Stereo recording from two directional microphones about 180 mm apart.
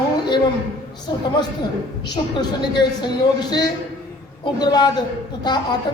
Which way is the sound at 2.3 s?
25° left (ahead or behind).